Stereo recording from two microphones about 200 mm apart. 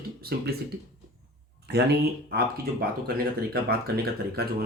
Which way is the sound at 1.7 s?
55° right (ahead or behind).